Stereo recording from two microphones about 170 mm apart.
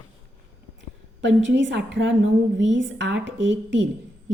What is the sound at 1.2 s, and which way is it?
Speech, 90° right.